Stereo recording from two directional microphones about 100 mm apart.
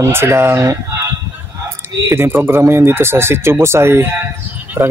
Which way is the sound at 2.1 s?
25° right (ahead or behind).